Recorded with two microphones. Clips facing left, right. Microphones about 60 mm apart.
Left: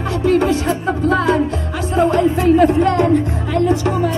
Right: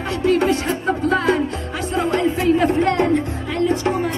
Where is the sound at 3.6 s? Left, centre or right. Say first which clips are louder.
Left 1 dB; right.